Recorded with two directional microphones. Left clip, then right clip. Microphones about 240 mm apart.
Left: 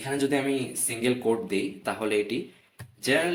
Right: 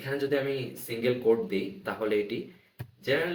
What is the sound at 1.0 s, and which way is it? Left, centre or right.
Speech, left.